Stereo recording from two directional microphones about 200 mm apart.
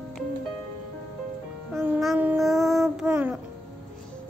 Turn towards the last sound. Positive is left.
turn(degrees=-10)  # may be behind; listen again after turning